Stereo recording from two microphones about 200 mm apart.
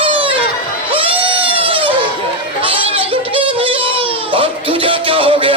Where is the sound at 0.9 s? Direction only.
25° right (ahead or behind).